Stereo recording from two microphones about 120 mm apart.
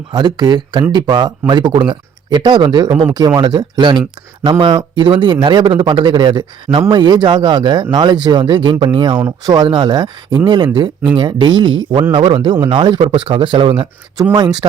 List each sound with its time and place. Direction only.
0.1 s speech: 40° right (ahead or behind)